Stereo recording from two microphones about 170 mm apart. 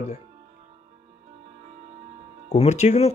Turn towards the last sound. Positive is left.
turn(degrees=40)  # may be behind; listen again after turning